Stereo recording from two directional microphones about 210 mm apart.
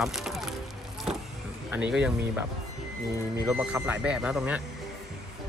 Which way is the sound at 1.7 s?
5° right (ahead or behind).